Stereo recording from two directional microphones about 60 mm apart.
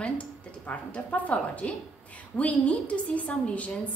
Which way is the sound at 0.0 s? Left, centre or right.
Left.